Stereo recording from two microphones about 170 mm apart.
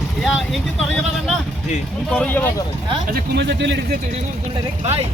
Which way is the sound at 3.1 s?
90° right.